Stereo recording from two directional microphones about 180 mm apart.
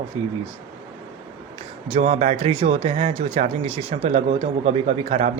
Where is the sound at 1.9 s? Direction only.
40° right (ahead or behind).